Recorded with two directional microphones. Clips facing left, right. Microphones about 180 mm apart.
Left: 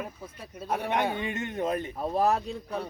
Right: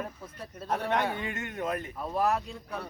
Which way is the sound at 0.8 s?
15° left (ahead or behind).